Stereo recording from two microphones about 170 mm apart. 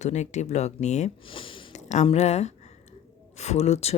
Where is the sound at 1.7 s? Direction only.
40° left (ahead or behind).